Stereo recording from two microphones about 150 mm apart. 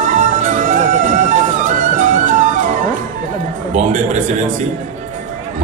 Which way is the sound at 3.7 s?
55° right (ahead or behind).